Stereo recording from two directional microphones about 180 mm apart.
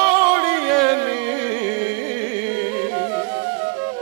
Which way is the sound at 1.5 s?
30° right (ahead or behind).